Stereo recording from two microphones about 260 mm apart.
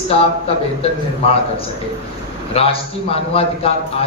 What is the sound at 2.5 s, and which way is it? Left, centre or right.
A man's voice, left.